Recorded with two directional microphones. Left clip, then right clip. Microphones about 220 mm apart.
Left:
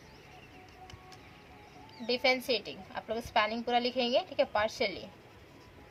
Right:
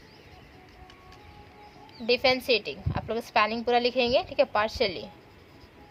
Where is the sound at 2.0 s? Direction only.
40° right (ahead or behind).